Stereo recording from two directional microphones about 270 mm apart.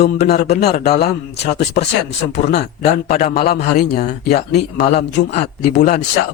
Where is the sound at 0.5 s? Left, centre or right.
Left.